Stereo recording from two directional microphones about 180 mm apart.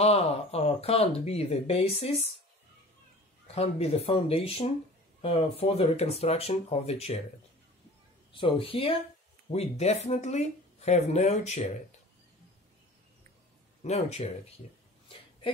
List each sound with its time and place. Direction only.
0.0 s speech: 35° left (ahead or behind)
3.5 s speech: 35° left (ahead or behind)
8.3 s speech: 30° left (ahead or behind)
13.8 s speech: 35° left (ahead or behind)